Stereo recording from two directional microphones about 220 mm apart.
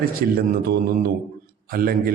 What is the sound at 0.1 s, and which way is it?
A man's voice, 40° right (ahead or behind).